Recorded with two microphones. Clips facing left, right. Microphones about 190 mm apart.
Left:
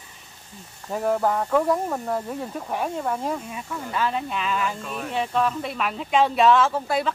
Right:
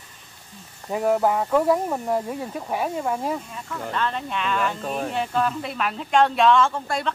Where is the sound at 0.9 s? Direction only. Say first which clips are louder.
Right 2 dB; 10° right (ahead or behind).